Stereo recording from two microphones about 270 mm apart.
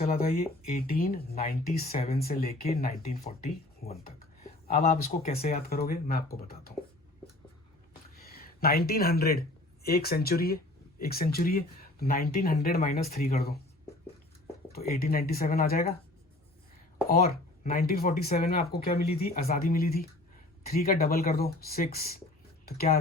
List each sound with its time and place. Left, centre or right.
0.0 s speech: left
8.1 s a sound: left
9.8 s speech: left
14.7 s speech: left
17.1 s speech: left